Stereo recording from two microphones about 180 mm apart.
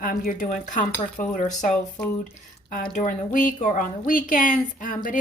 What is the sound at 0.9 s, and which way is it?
Dishes, 10° left (ahead or behind).